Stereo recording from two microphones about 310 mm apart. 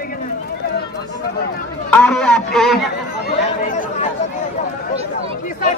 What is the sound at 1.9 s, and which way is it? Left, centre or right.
A man's voice, centre.